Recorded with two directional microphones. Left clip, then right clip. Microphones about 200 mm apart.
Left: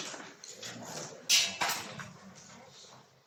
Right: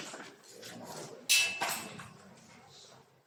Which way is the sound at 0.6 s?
Centre (ahead or behind).